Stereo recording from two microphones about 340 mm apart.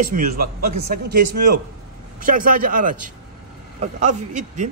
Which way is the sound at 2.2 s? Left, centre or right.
Right.